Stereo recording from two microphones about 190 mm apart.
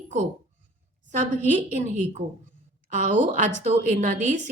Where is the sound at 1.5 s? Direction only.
40° right (ahead or behind).